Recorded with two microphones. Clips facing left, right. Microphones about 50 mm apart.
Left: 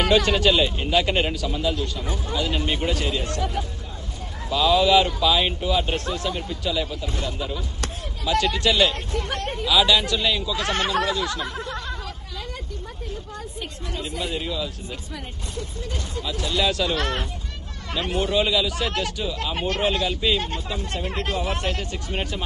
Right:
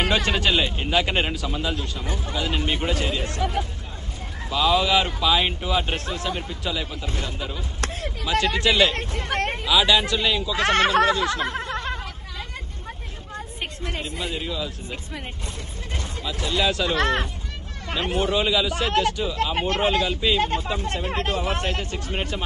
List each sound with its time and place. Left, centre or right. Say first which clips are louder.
0.0 s speech: left 3 dB; right
9.6 s a man's voice: left 1 dB; right
10.5 s speech: right 4 dB; right
13.3 s a woman's voice: right 1 dB; right
14.3 s speech: left 1 dB; centre
16.3 s speech: even; right
18.3 s speech: left 2 dB; centre
18.7 s speech: right 4 dB; right